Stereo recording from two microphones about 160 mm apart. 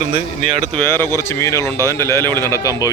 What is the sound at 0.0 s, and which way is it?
Speech, 55° right (ahead or behind).